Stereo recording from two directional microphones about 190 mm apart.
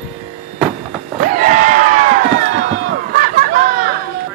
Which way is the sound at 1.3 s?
45° right (ahead or behind).